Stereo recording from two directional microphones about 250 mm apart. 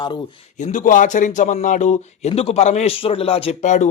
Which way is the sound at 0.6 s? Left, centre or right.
Left.